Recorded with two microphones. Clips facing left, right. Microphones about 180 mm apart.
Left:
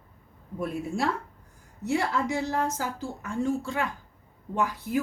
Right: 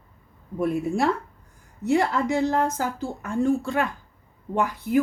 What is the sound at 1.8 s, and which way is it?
A woman's voice, 60° right (ahead or behind).